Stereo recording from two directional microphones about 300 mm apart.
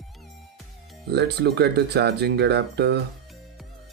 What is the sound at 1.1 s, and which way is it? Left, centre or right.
Speech, right.